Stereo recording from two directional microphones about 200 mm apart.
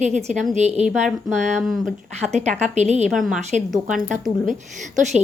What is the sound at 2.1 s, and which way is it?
Speech, 35° right (ahead or behind).